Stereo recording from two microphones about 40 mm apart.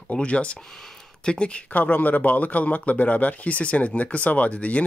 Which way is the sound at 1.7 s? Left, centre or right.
Left.